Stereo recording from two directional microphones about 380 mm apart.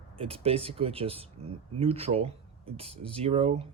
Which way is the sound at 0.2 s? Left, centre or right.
Centre.